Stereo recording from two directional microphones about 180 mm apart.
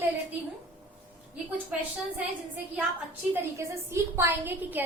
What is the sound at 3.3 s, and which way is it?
A woman's voice, 15° right (ahead or behind).